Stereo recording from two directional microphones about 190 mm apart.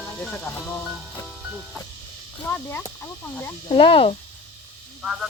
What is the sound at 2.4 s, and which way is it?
Speech, 10° left (ahead or behind).